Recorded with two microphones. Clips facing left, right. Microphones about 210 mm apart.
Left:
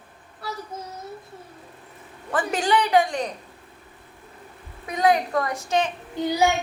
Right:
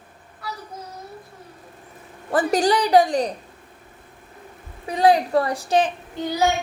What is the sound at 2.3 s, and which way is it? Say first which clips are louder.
Speech: right 4 dB; 40° right (ahead or behind).